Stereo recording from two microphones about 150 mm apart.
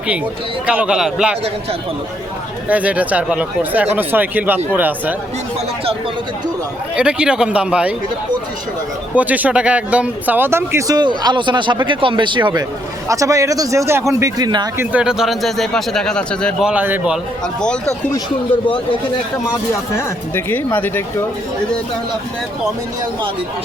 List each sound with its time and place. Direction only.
0.7 s speech: 5° right (ahead or behind)
2.6 s speech: 10° right (ahead or behind)
6.9 s speech: 5° right (ahead or behind)
9.1 s speech: 10° right (ahead or behind); by 12.6 s 30° right (ahead or behind)
13.1 s speech: 20° right (ahead or behind)
14.8 s speech: 5° right (ahead or behind)
16.6 s speech: 10° right (ahead or behind)
17.6 s speech: 5° left (ahead or behind)
19.9 s speech: 15° left (ahead or behind)